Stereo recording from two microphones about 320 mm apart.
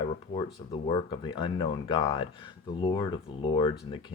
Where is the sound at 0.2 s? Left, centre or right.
Centre.